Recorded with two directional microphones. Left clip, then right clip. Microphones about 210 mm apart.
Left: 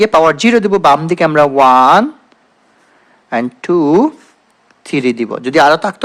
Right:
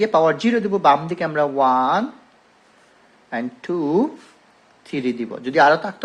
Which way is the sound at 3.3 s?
45° left (ahead or behind).